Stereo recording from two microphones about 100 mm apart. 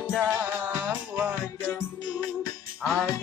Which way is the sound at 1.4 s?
25° left (ahead or behind).